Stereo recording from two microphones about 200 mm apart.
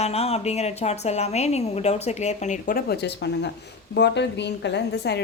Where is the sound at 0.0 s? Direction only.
30° left (ahead or behind).